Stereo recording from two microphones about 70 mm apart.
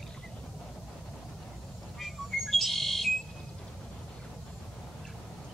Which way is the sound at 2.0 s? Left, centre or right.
Centre.